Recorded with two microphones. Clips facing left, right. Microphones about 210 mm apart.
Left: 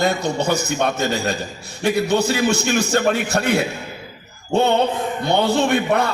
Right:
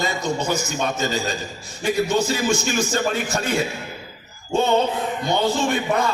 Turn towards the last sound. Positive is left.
turn(degrees=65)  # may be behind; listen again after turning